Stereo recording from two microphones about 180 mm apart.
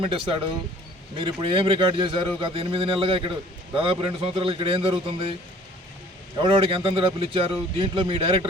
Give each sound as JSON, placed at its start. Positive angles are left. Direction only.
{"t": 0.1, "sound": "a man's voice", "side_deg": -30}
{"t": 6.3, "sound": "a man's voice", "side_deg": -25}